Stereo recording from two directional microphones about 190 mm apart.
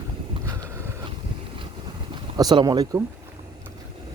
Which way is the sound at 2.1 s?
20° right (ahead or behind).